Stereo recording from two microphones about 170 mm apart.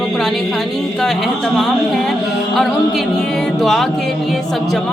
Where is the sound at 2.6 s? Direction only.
Centre (ahead or behind).